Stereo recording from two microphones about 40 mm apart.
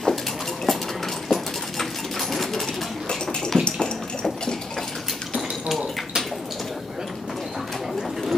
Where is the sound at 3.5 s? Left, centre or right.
Left.